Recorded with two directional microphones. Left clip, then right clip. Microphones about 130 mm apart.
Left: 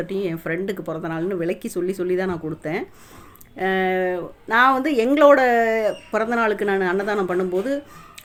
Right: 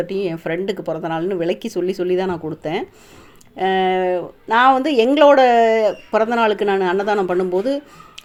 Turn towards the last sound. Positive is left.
turn(degrees=-15)  # may be behind; listen again after turning